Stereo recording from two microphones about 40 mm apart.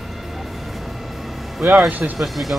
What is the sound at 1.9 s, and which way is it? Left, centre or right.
Speech, right.